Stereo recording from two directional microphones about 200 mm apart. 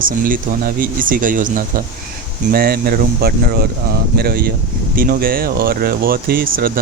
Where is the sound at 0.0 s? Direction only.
45° right (ahead or behind).